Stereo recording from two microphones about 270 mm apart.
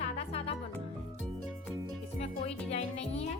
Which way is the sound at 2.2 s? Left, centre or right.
Left.